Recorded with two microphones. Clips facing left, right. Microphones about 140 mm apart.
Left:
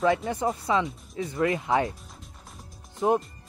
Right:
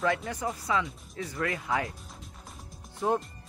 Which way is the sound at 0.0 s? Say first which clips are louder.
Left 5 dB; 25° left (ahead or behind).